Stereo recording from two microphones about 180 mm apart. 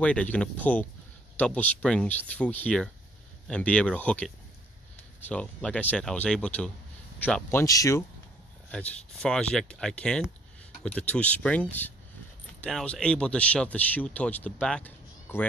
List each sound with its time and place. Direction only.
0.0 s speech: 5° left (ahead or behind)
7.6 s speech: 20° left (ahead or behind)
8.7 s speech: 5° left (ahead or behind)